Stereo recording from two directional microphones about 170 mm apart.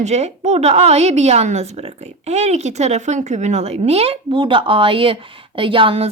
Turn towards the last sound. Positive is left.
turn(degrees=-35)  # may be behind; listen again after turning